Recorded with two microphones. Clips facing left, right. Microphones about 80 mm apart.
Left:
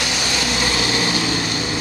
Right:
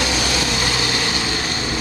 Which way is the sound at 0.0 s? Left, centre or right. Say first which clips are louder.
Right 3 dB; right.